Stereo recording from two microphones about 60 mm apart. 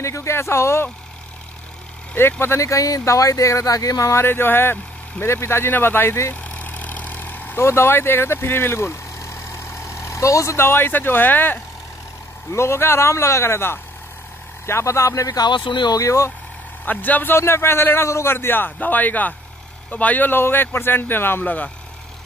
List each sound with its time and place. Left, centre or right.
0.0 s speech: left
2.4 s speech: left
4.1 s a man's voice: left
6.3 s vehicle: left
7.5 s speech: left
12.5 s speech: left
16.8 s a man's voice: left
17.4 s a man's voice: left